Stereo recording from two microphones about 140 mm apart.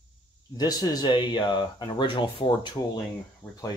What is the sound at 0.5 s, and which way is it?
Speech, 30° left (ahead or behind).